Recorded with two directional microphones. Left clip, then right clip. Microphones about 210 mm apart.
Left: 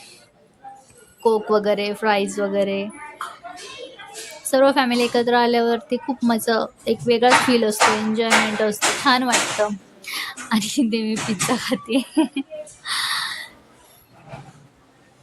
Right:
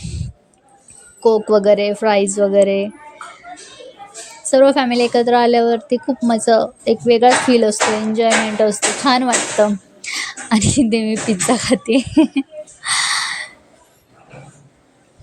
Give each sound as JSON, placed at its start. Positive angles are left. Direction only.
{"t": 1.2, "sound": "speech", "side_deg": -15}
{"t": 4.5, "sound": "a woman's voice", "side_deg": -20}
{"t": 10.0, "sound": "a sound", "side_deg": -25}